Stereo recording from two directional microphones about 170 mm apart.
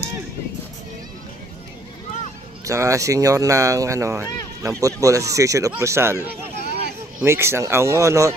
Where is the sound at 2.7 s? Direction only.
20° right (ahead or behind).